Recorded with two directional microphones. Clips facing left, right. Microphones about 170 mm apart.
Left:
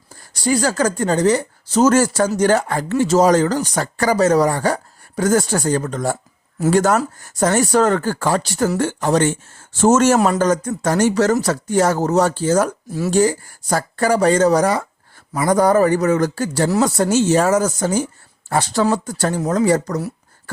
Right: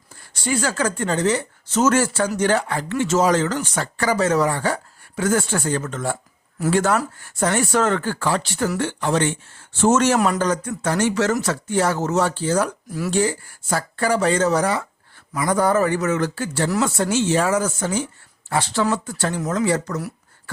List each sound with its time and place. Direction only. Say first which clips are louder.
0.3 s speech: left 5 dB; 40° left (ahead or behind)